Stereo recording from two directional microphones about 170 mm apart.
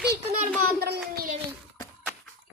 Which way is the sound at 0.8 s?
65° right (ahead or behind).